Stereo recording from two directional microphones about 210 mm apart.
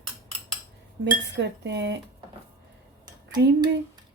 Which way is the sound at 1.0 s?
55° right (ahead or behind).